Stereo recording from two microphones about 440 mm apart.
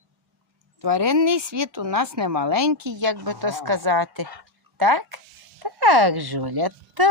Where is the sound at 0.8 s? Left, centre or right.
Right.